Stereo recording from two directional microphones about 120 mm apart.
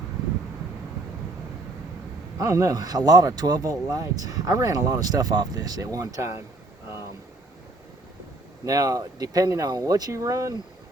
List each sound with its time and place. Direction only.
2.4 s speech: 30° right (ahead or behind)
8.6 s speech: 30° right (ahead or behind)